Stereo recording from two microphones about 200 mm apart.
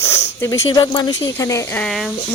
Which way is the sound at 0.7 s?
20° left (ahead or behind).